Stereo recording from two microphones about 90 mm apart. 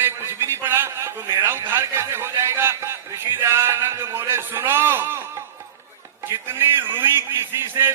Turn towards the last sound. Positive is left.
turn(degrees=-25)  # may be behind; listen again after turning